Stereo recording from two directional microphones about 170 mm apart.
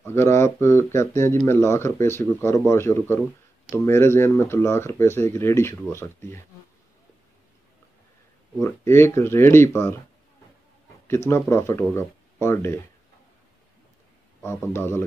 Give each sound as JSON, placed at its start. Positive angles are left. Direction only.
{"t": 0.0, "sound": "speech", "side_deg": 15}
{"t": 8.5, "sound": "speech", "side_deg": 15}
{"t": 11.2, "sound": "speech", "side_deg": 15}
{"t": 14.4, "sound": "speech", "side_deg": 15}